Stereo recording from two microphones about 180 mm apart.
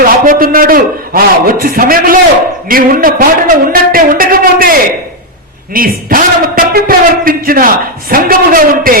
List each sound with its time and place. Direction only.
0.0 s a man's voice: 50° right (ahead or behind)